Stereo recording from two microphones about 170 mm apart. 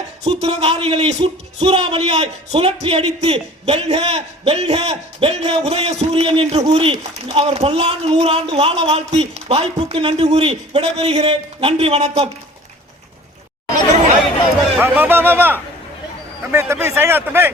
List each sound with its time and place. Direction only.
0.3 s speech: 40° right (ahead or behind)
14.8 s speech: 10° right (ahead or behind)